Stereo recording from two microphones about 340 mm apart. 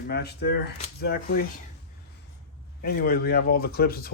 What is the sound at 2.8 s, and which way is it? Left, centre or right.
Speech, left.